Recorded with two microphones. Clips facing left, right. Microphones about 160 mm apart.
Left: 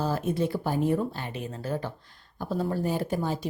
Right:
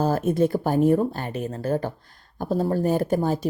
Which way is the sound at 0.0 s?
45° right (ahead or behind).